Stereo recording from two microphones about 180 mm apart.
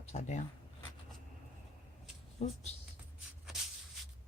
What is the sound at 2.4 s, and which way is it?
Speech, 35° left (ahead or behind).